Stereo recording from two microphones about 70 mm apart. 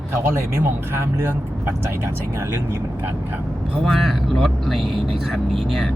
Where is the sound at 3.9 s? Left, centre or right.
Centre.